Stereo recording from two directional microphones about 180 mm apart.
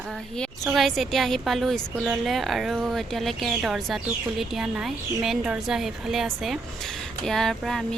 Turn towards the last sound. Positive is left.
turn(degrees=0)  # may be behind; listen again after turning